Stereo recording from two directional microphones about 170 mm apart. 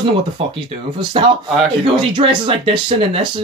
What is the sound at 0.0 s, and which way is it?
Speech, 30° right (ahead or behind).